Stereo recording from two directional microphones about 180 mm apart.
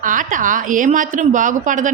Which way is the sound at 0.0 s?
50° right (ahead or behind).